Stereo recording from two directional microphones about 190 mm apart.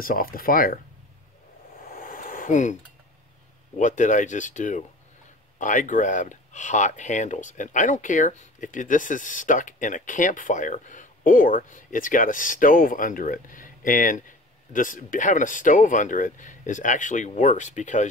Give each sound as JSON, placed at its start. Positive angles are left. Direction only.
{"t": 0.0, "sound": "speech", "side_deg": 50}
{"t": 1.8, "sound": "a sound", "side_deg": 50}
{"t": 3.7, "sound": "speech", "side_deg": 40}